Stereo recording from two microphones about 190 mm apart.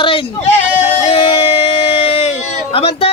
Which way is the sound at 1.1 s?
30° left (ahead or behind).